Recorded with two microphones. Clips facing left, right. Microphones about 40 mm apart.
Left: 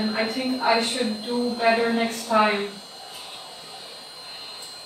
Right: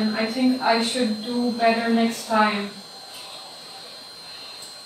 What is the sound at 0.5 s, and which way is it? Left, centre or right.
Speech, centre.